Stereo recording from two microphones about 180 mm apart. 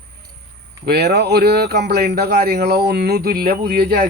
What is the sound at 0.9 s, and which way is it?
Speech, 65° right (ahead or behind).